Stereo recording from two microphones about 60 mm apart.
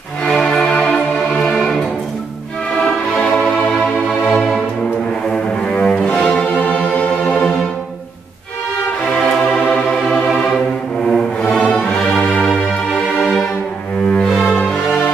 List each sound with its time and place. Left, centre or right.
0.2 s music: centre
5.3 s cello: centre
9.5 s music: centre
13.2 s music: centre
14.3 s music: centre